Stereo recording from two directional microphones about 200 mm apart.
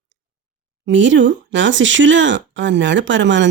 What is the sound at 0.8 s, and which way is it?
Speech, 65° right (ahead or behind).